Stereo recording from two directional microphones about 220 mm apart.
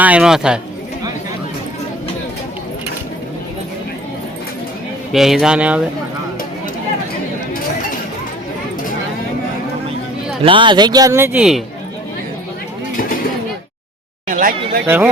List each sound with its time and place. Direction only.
0.0 s speech: 5° right (ahead or behind)
5.1 s speech: centre (ahead or behind)
10.4 s speech: 20° right (ahead or behind); by 11.6 s 5° right (ahead or behind)
14.3 s a sound: 40° right (ahead or behind)
14.8 s speech: 10° right (ahead or behind)